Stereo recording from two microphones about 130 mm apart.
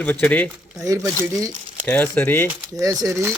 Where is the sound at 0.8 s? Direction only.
25° right (ahead or behind).